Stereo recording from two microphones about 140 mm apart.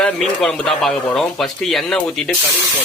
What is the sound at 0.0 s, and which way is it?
Speech, 5° left (ahead or behind).